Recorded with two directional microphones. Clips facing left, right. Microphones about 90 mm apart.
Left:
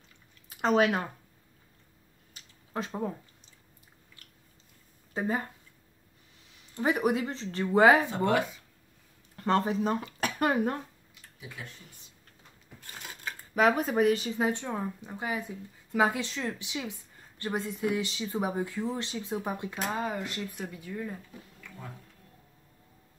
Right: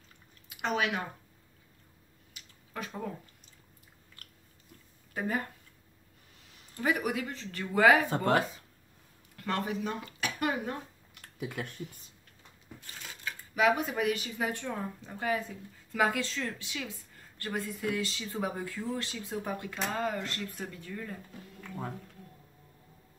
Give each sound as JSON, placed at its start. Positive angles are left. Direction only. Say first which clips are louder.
{"t": 0.5, "sound": "speech", "louder": "left 7 dB", "side_deg": 40}
{"t": 2.3, "sound": "a sound", "louder": "left 6 dB", "side_deg": 30}
{"t": 5.1, "sound": "speech", "louder": "left 2 dB", "side_deg": 25}
{"t": 6.7, "sound": "a woman's voice", "louder": "left 4 dB", "side_deg": 30}
{"t": 8.3, "sound": "speech", "louder": "right 1 dB", "side_deg": -40}
{"t": 9.4, "sound": "speech", "louder": "left 6 dB", "side_deg": 35}
{"t": 11.1, "sound": "a sound", "louder": "right 7 dB", "side_deg": -60}
{"t": 13.2, "sound": "a woman's voice", "louder": "left 3 dB", "side_deg": 40}